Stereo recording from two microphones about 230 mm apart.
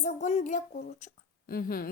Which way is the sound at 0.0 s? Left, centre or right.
Left.